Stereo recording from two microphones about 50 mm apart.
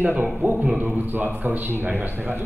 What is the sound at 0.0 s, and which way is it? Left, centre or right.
A man's voice, right.